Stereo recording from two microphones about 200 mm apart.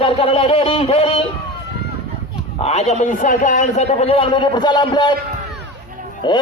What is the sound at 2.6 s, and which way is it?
A man's voice, 30° left (ahead or behind).